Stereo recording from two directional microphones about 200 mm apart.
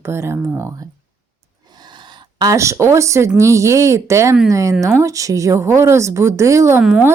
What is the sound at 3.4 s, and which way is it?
Speech, 15° right (ahead or behind).